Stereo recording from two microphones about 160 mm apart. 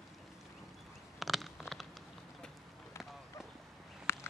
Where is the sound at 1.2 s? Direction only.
Centre (ahead or behind).